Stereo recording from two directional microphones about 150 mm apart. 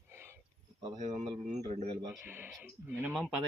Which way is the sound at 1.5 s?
50° right (ahead or behind).